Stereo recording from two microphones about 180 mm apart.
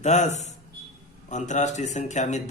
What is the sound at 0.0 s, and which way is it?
A man's voice, 40° left (ahead or behind).